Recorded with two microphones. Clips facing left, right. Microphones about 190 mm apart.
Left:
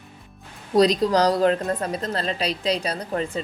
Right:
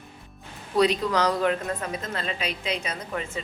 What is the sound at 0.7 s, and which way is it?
A woman's voice, 35° left (ahead or behind).